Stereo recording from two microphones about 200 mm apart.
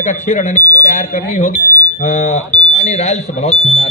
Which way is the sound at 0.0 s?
35° left (ahead or behind).